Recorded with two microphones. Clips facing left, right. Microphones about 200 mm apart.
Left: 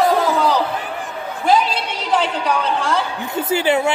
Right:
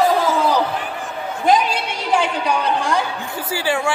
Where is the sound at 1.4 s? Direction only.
15° right (ahead or behind).